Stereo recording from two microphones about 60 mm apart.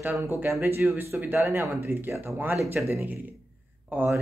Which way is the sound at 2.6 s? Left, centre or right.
Right.